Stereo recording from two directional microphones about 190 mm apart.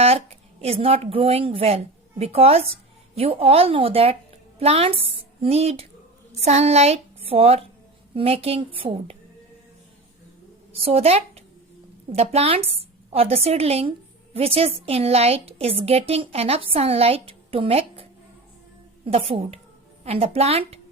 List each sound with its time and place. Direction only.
0.0 s a woman's voice: 30° right (ahead or behind)
10.8 s a woman's voice: 30° right (ahead or behind)